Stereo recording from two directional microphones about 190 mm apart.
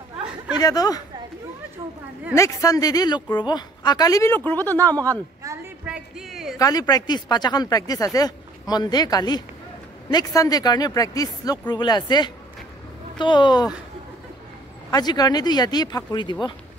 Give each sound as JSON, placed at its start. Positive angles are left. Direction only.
{"t": 0.6, "sound": "speech", "side_deg": 20}
{"t": 2.3, "sound": "speech", "side_deg": 15}
{"t": 5.1, "sound": "a sound", "side_deg": -15}
{"t": 5.9, "sound": "music", "side_deg": -5}
{"t": 6.6, "sound": "speech", "side_deg": 20}
{"t": 14.9, "sound": "speech", "side_deg": 20}